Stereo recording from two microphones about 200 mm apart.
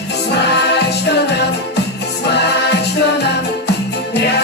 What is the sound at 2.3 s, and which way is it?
Music, 55° left (ahead or behind).